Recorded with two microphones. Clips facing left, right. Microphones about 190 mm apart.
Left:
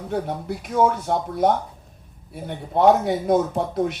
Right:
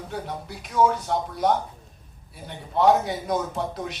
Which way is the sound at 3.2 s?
50° left (ahead or behind).